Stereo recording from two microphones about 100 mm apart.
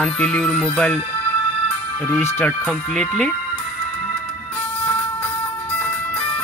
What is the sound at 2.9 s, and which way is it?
Speech, 10° left (ahead or behind).